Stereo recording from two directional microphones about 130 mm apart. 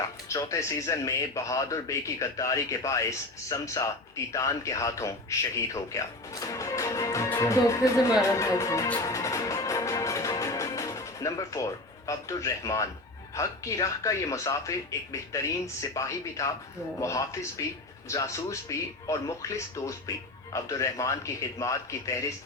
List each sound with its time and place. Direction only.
0.3 s a man's voice: 25° left (ahead or behind)
9.0 s music: 25° left (ahead or behind)
13.3 s speech: 25° left (ahead or behind)